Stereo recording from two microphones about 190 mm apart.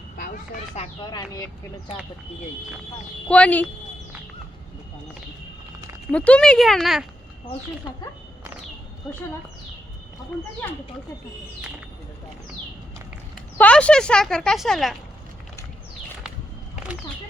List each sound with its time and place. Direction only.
1.0 s speech: 20° left (ahead or behind)
3.2 s speech: 5° left (ahead or behind)
6.1 s speech: 5° left (ahead or behind)
13.3 s speech: 5° left (ahead or behind)